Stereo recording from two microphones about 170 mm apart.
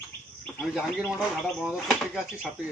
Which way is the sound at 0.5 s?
5° right (ahead or behind).